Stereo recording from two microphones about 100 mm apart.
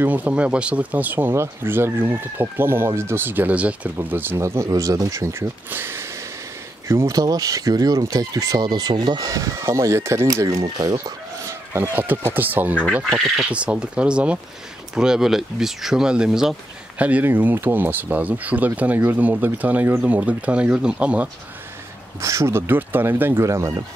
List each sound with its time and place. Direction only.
0.0 s speech: 15° right (ahead or behind)
7.2 s speech: 40° right (ahead or behind)
11.7 s speech: 20° right (ahead or behind)
13.1 s speech: centre (ahead or behind)
13.5 s speech: 10° right (ahead or behind)
17.0 s speech: 15° right (ahead or behind)
22.2 s speech: 30° right (ahead or behind)